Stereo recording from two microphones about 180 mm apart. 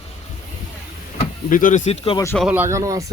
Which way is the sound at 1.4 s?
50° left (ahead or behind).